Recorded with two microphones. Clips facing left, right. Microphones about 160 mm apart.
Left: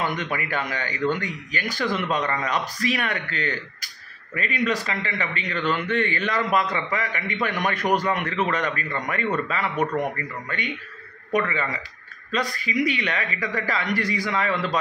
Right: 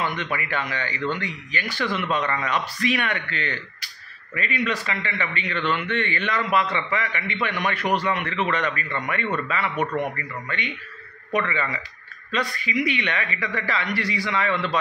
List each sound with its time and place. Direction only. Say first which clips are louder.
0.0 s a man's voice: left 1 dB; 45° left (ahead or behind)
11.3 s a man's voice: left 1 dB; 40° left (ahead or behind)